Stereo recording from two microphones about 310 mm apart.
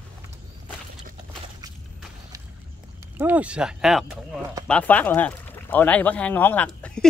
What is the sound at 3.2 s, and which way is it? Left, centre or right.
Speech, centre.